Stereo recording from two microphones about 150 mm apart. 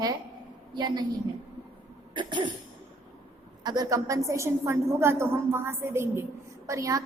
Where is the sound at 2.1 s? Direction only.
30° right (ahead or behind).